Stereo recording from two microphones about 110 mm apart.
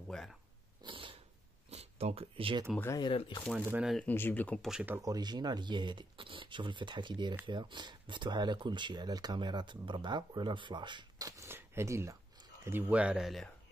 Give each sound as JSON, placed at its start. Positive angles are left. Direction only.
{"t": 0.1, "sound": "speech", "side_deg": 5}
{"t": 0.8, "sound": "dog", "side_deg": -50}
{"t": 1.7, "sound": "speech", "side_deg": -75}
{"t": 3.0, "sound": "speech", "side_deg": 50}
{"t": 4.0, "sound": "speech", "side_deg": 15}
{"t": 4.6, "sound": "speech", "side_deg": -5}
{"t": 5.0, "sound": "speech", "side_deg": -40}
{"t": 11.4, "sound": "speech", "side_deg": -20}
{"t": 13.2, "sound": "speech", "side_deg": 0}